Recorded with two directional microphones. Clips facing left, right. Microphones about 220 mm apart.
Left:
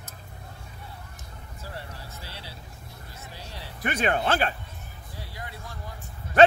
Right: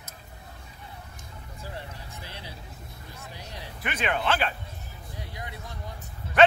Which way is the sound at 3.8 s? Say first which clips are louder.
Left 4 dB; 40° left (ahead or behind).